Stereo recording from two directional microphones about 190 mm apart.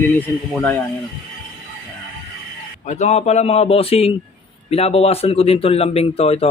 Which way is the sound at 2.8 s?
40° left (ahead or behind).